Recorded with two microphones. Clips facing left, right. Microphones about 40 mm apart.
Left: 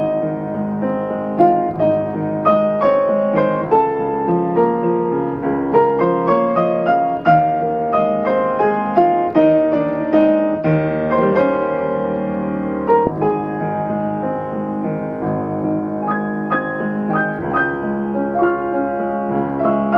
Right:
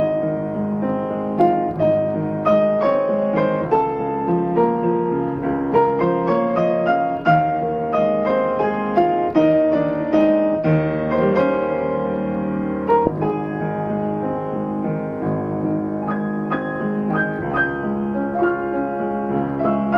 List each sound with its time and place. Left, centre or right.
1.4 s music: centre
2.4 s piano: centre
4.3 s music: centre
12.8 s music: centre